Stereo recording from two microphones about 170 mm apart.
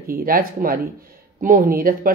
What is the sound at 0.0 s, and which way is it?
Speech, 60° right (ahead or behind).